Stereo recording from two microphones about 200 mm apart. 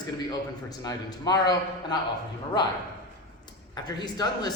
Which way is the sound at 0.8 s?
20° left (ahead or behind).